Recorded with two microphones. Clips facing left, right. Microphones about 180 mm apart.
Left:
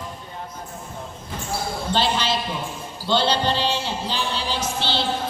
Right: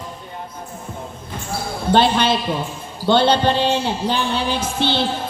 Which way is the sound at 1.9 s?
55° right (ahead or behind).